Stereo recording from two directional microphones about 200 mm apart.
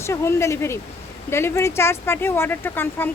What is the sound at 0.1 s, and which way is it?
Speech, 15° left (ahead or behind).